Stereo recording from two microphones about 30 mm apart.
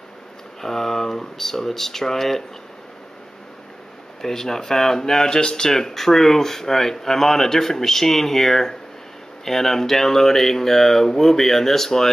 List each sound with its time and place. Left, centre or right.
0.6 s speech: centre
4.2 s speech: centre